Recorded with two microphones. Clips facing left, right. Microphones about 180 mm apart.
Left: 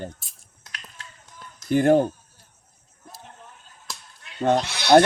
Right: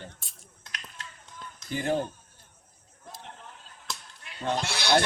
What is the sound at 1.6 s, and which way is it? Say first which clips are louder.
Speech: left 11 dB; 55° left (ahead or behind).